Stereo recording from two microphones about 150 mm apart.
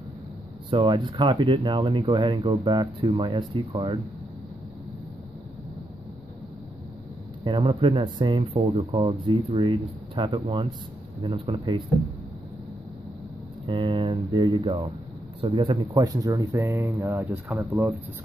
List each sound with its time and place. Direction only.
0.7 s speech: 35° right (ahead or behind)
7.6 s speech: 35° right (ahead or behind)
13.7 s speech: 35° right (ahead or behind); by 17.9 s 15° right (ahead or behind)